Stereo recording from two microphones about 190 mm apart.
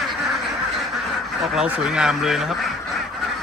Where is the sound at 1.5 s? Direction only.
5° right (ahead or behind).